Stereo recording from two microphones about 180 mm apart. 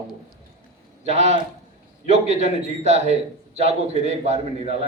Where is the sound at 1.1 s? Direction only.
35° right (ahead or behind).